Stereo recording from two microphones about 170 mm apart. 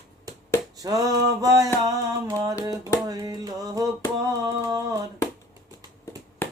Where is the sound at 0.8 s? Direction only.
20° right (ahead or behind).